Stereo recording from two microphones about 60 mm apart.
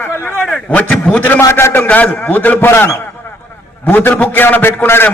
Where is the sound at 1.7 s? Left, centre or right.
Left.